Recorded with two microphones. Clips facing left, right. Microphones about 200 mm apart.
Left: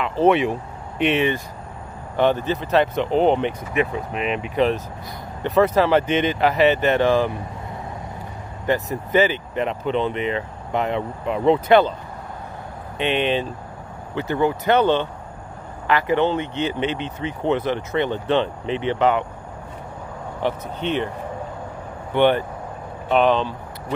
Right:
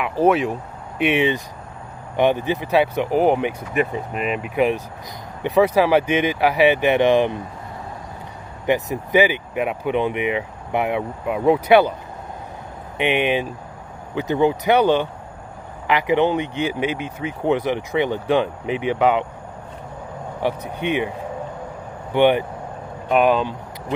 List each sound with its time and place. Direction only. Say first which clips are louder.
0.2 s speech: even; centre (ahead or behind); by 7.3 s 20° right (ahead or behind)
8.6 s speech: right 2 dB; 15° right (ahead or behind)
12.9 s speech: right 1 dB; 15° right (ahead or behind)
20.4 s speech: right 1 dB; 10° right (ahead or behind)
22.1 s speech: right 1 dB; 15° right (ahead or behind)